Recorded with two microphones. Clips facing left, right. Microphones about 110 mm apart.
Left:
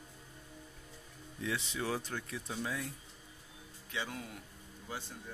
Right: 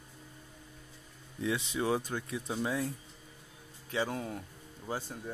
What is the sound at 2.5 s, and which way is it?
Speech, 30° right (ahead or behind).